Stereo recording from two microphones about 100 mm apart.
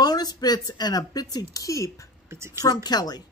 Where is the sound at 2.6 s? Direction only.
40° left (ahead or behind).